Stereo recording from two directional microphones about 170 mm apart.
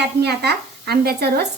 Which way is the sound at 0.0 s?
75° right (ahead or behind).